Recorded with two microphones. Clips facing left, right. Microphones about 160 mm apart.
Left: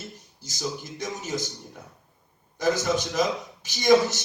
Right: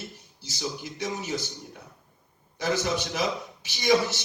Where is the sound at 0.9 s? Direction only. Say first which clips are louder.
Even; 50° left (ahead or behind).